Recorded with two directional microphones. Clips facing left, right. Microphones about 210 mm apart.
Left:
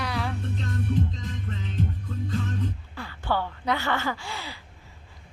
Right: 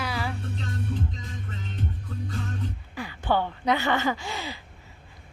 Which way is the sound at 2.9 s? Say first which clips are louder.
Right 5 dB; 15° right (ahead or behind).